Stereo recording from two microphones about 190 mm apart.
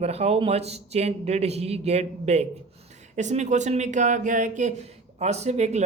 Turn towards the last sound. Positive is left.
turn(degrees=-35)  # may be behind; listen again after turning